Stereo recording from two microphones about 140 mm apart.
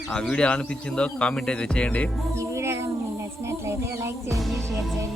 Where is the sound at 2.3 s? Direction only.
20° right (ahead or behind).